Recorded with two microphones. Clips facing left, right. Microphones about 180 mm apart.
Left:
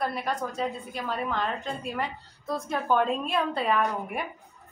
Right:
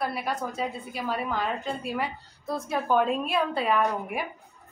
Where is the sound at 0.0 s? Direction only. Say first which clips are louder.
Even; 5° right (ahead or behind).